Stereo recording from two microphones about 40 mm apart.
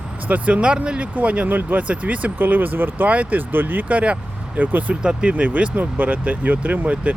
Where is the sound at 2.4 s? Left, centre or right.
Right.